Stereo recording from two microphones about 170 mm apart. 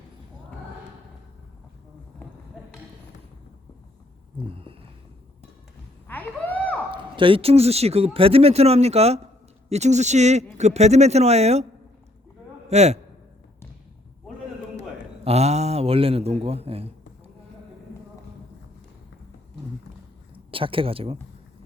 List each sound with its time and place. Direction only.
6.1 s a sound: 10° left (ahead or behind)
6.9 s speech: 30° right (ahead or behind)
12.6 s a man's voice: 40° right (ahead or behind)
15.2 s a man's voice: 40° right (ahead or behind)
20.5 s speech: 30° right (ahead or behind)